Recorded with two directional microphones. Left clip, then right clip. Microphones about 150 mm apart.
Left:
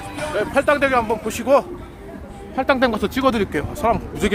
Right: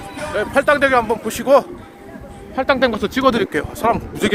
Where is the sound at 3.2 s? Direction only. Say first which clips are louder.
Right 4 dB; centre (ahead or behind).